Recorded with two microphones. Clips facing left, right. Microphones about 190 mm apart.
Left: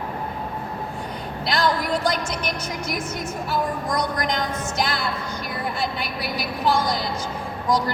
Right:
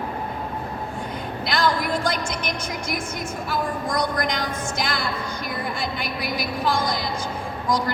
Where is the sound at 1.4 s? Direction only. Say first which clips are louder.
Even; 35° left (ahead or behind).